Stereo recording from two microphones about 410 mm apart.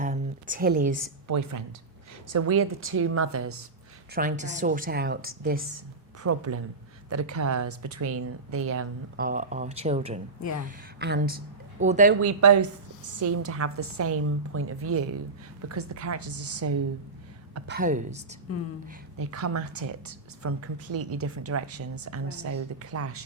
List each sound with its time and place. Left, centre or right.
0.0 s a sound: centre
1.3 s a woman's voice: right
2.3 s a woman's voice: right
4.1 s a woman's voice: centre
6.2 s a woman's voice: right
9.2 s a woman's voice: centre
12.2 s a woman's voice: right
13.2 s a woman's voice: right
17.5 s a woman's voice: right
19.1 s a woman's voice: right